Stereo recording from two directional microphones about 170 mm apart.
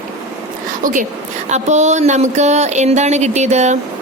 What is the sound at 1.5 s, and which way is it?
A woman's voice, 45° right (ahead or behind).